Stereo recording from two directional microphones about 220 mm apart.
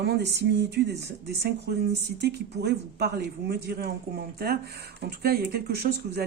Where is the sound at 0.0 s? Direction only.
50° right (ahead or behind).